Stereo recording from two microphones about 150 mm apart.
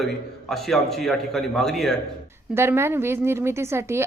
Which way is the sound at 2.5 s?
15° right (ahead or behind).